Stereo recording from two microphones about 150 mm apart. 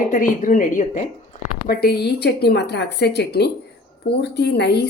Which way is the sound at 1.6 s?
90° left.